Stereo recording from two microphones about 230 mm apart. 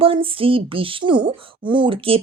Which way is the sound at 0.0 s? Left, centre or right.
Right.